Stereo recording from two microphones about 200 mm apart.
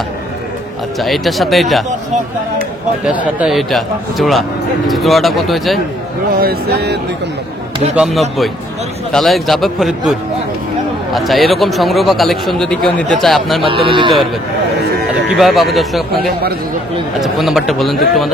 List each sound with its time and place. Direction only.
0.9 s a man's voice: centre (ahead or behind)
3.1 s a man's voice: 5° right (ahead or behind)
6.4 s speech: 55° right (ahead or behind)
7.9 s a man's voice: centre (ahead or behind)
11.1 s a man's voice: centre (ahead or behind)
13.7 s speech: 25° right (ahead or behind)
15.3 s a man's voice: centre (ahead or behind)